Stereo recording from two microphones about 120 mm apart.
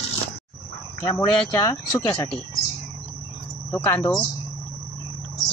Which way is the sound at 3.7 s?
15° left (ahead or behind).